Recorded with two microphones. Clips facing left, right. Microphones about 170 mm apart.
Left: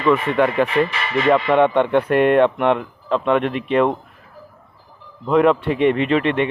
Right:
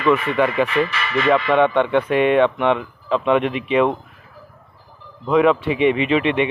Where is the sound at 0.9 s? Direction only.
20° left (ahead or behind); by 3.2 s centre (ahead or behind).